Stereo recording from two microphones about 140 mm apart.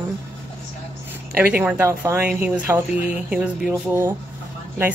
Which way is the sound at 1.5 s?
10° right (ahead or behind).